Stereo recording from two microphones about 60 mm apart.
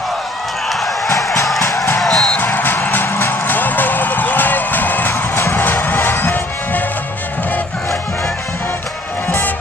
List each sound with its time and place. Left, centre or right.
0.7 s a sound: centre
2.0 s music: centre
2.5 s music: left
5.3 s music: left